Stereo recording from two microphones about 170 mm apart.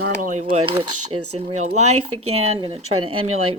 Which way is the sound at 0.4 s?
30° right (ahead or behind).